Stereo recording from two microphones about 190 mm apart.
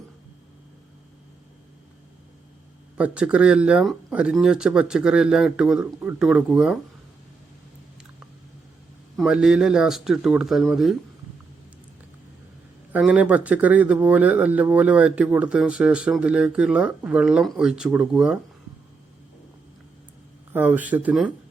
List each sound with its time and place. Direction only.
3.0 s speech: 5° right (ahead or behind)
9.1 s speech: 5° right (ahead or behind)
12.9 s speech: 5° right (ahead or behind)
20.5 s speech: 10° right (ahead or behind)